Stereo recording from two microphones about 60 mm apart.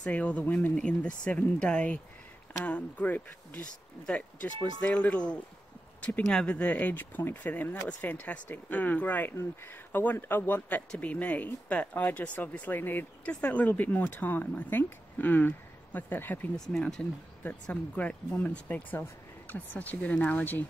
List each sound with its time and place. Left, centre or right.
0.0 s speech: left
5.9 s a sound: left
6.2 s speech: centre; by 16.4 s left
16.5 s speech: centre
17.9 s speech: left